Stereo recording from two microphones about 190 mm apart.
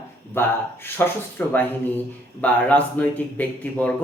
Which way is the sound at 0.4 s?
10° left (ahead or behind).